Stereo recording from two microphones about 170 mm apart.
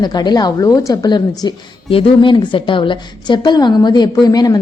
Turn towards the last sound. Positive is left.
turn(degrees=20)  # may be behind; listen again after turning